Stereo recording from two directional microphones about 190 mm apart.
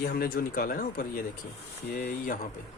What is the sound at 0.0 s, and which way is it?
Speech, 50° left (ahead or behind).